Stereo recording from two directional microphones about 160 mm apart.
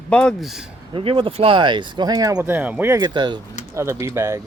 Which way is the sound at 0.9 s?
30° right (ahead or behind).